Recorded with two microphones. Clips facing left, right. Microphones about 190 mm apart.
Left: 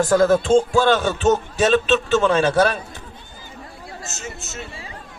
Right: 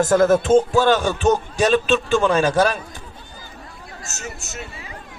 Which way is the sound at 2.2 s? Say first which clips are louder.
Even; 10° right (ahead or behind).